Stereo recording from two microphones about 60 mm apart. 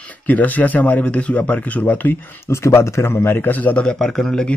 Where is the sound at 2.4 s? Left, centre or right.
Left.